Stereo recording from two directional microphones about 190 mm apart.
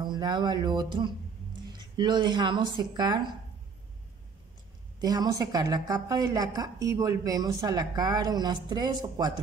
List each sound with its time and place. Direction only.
0.0 s a woman's voice: 20° right (ahead or behind)
5.0 s a woman's voice: 20° right (ahead or behind)